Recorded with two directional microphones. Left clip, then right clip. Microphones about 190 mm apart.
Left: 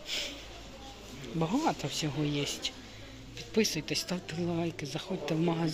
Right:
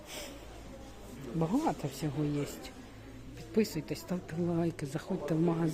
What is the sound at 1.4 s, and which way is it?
Speech, 5° right (ahead or behind).